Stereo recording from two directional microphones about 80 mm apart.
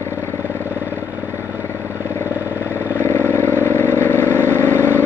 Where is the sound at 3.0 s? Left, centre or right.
Left.